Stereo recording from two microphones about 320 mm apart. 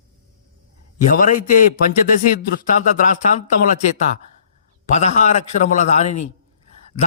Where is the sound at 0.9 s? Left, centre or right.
Left.